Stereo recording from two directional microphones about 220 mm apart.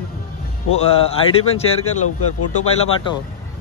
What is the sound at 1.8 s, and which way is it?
Speech, 90° left.